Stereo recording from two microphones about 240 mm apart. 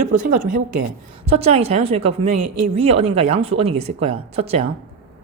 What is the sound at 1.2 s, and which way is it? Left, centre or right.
Speech, right.